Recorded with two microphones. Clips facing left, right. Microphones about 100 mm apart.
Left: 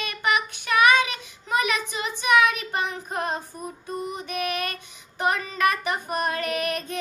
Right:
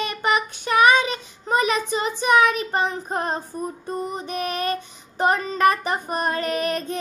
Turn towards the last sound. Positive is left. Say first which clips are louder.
# right 3 dB
turn(degrees=-30)  # may be behind; listen again after turning